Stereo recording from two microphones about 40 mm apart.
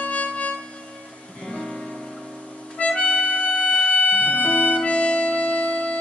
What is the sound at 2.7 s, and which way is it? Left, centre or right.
Music, left.